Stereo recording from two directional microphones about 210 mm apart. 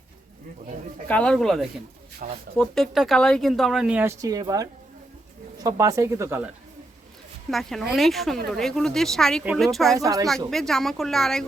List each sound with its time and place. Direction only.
1.0 s speech: 5° left (ahead or behind)
2.2 s speech: 35° right (ahead or behind)
2.6 s speech: centre (ahead or behind)
7.5 s speech: centre (ahead or behind)
10.0 s speech: 15° right (ahead or behind)
10.5 s speech: centre (ahead or behind)